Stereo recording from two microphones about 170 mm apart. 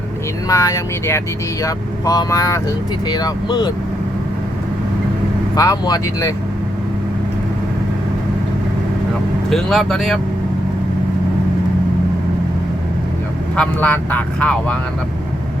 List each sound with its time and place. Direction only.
0.4 s speech: 20° left (ahead or behind)
5.5 s speech: 20° left (ahead or behind)
9.5 s speech: centre (ahead or behind)
13.6 s speech: 10° left (ahead or behind)